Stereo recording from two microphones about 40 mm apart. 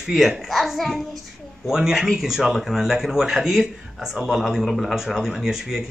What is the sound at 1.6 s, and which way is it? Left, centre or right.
Speech, centre.